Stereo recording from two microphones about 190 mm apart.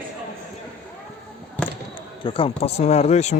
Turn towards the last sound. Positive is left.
turn(degrees=35)  # may be behind; listen again after turning